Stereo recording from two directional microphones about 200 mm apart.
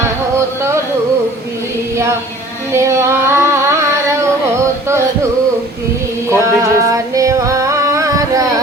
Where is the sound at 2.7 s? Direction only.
15° right (ahead or behind).